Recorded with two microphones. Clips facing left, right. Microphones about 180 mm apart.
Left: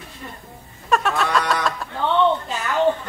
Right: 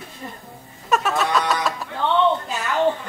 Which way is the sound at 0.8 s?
Centre (ahead or behind).